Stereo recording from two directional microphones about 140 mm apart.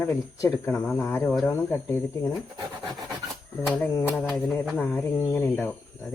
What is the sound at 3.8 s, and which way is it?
Speech, 20° left (ahead or behind).